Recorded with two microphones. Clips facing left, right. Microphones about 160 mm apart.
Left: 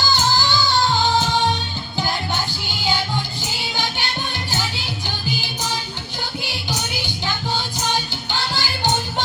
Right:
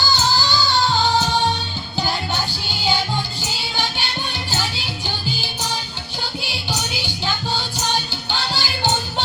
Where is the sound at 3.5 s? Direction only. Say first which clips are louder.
Even; 15° left (ahead or behind).